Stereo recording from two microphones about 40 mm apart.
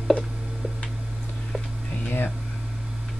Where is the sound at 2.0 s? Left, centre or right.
Left.